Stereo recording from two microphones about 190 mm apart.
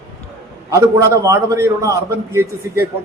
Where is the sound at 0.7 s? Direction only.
15° right (ahead or behind).